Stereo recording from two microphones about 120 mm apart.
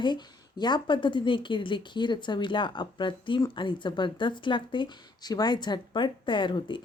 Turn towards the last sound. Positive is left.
turn(degrees=45)  # may be behind; listen again after turning